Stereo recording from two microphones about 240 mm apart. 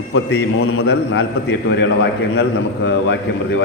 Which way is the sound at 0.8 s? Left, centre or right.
Left.